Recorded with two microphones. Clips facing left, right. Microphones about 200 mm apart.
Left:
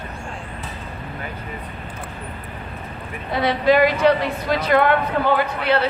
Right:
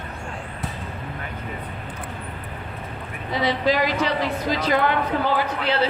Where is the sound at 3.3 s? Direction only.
60° left (ahead or behind).